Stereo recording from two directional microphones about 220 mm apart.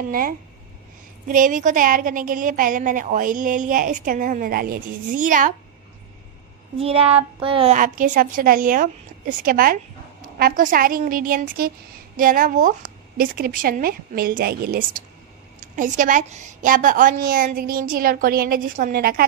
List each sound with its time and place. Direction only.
1.3 s a woman's voice: 35° right (ahead or behind)
6.8 s a child's voice: 25° right (ahead or behind)
7.7 s a woman's voice: 35° right (ahead or behind)